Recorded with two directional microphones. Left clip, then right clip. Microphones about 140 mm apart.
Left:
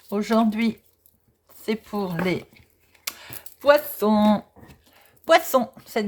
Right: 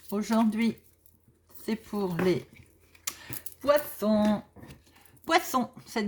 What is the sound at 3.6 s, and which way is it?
Speech, 75° left (ahead or behind).